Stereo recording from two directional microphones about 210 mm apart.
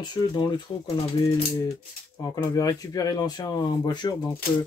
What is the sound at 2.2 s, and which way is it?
Speech, 15° left (ahead or behind).